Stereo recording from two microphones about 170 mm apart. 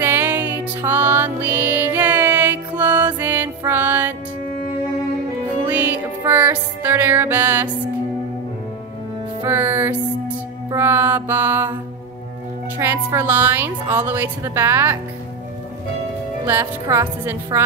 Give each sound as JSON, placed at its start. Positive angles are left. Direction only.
{"t": 0.0, "sound": "music", "side_deg": -15}
{"t": 5.7, "sound": "music", "side_deg": -10}
{"t": 9.4, "sound": "music", "side_deg": -15}
{"t": 10.7, "sound": "mantra", "side_deg": -15}
{"t": 12.7, "sound": "a woman's voice", "side_deg": -20}
{"t": 16.4, "sound": "a woman's voice", "side_deg": -15}